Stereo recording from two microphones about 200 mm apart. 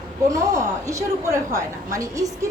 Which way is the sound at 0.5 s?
15° right (ahead or behind).